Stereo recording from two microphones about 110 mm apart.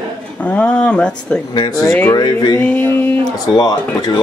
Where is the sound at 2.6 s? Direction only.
15° left (ahead or behind).